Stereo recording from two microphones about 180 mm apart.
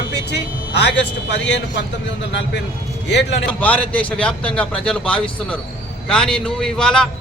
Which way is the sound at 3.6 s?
10° left (ahead or behind).